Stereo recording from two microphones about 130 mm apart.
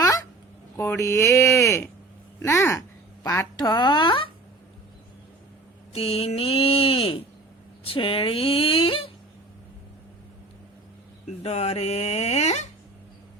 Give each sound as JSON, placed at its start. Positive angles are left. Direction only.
{"t": 0.8, "sound": "speech", "side_deg": 20}
{"t": 5.9, "sound": "a sound", "side_deg": 50}
{"t": 11.3, "sound": "speech", "side_deg": 55}